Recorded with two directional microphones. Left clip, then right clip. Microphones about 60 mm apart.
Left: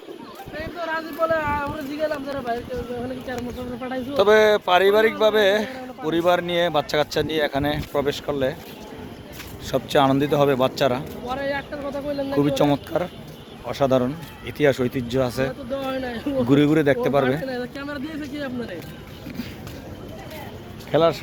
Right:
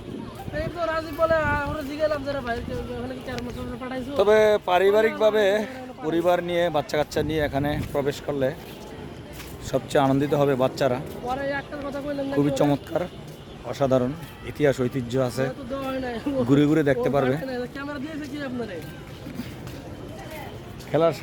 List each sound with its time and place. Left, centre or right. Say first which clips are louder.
0.9 s speech: even; right
2.0 s speech: even; centre
10.0 s a man's voice: left 4 dB; centre
10.2 s speech: left 3 dB; centre
15.8 s a sound: even; centre
16.5 s speech: left 3 dB; right
17.3 s a sound: left 2 dB; centre
18.3 s speech: left 1 dB; centre
20.9 s speech: left 3 dB; centre